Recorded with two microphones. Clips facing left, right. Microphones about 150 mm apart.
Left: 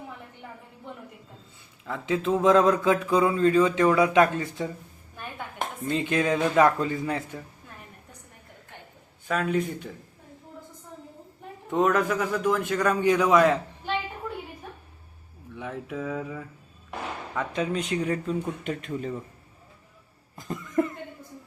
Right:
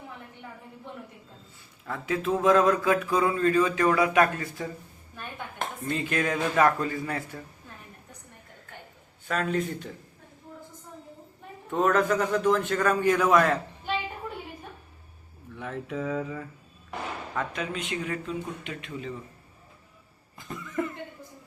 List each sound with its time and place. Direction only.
1.9 s mantra: 20° left (ahead or behind)
9.2 s a man's voice: 10° left (ahead or behind)
11.7 s a man's voice: 15° left (ahead or behind)
15.5 s a man's voice: 15° left (ahead or behind)
16.0 s a sound: 5° left (ahead or behind)
17.5 s speech: 35° left (ahead or behind)